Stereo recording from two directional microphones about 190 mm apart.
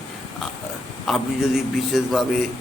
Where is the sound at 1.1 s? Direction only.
Centre (ahead or behind).